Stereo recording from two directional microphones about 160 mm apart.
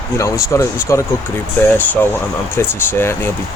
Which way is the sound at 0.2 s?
20° left (ahead or behind).